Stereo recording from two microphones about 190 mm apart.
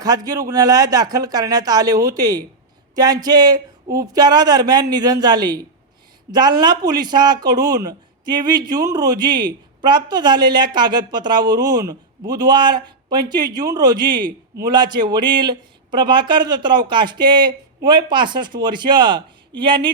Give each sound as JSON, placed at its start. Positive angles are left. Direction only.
{"t": 0.0, "sound": "speech", "side_deg": -20}